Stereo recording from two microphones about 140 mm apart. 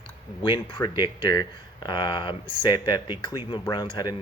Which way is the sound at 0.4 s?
35° left (ahead or behind).